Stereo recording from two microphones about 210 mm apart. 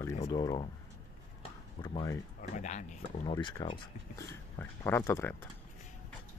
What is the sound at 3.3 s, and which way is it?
Speech, 20° left (ahead or behind).